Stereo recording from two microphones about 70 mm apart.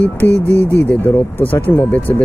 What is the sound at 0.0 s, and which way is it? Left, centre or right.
Speech, left.